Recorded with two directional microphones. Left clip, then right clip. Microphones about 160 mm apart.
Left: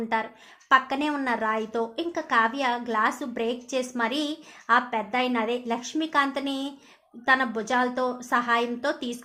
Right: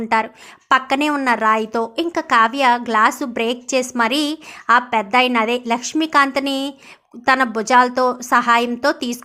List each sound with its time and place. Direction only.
0.7 s a woman's voice: 25° right (ahead or behind)